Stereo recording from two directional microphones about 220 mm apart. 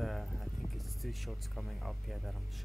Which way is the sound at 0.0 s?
Centre (ahead or behind).